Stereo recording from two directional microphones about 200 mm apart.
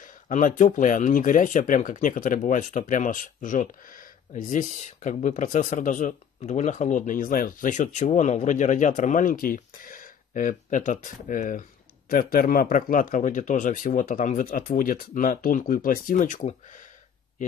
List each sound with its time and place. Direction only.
0.0 s a man's voice: 40° left (ahead or behind)